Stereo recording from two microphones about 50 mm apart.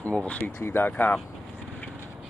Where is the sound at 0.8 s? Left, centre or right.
Left.